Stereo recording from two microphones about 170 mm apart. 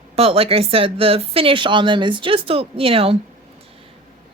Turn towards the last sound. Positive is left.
turn(degrees=-35)  # may be behind; listen again after turning